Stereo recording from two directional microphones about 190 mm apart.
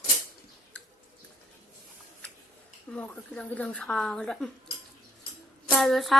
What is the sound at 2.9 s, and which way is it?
Speech, 5° left (ahead or behind).